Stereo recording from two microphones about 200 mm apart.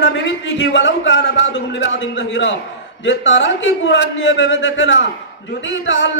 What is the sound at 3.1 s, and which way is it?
A man's voice, 65° left (ahead or behind).